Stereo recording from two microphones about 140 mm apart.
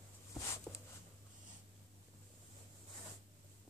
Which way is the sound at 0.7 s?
10° left (ahead or behind).